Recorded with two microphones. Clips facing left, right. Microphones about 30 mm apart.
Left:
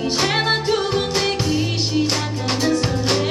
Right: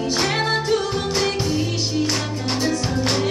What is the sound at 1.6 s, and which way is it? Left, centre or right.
Music, left.